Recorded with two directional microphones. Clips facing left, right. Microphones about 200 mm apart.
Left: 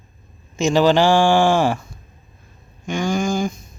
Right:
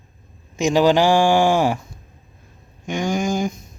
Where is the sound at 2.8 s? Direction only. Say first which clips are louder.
Left 1 dB; 20° right (ahead or behind).